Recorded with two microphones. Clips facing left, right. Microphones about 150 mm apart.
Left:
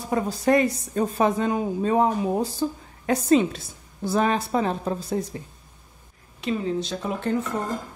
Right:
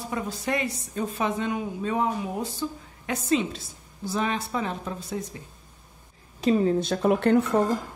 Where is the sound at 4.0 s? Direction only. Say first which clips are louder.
Left 5 dB; 55° left (ahead or behind).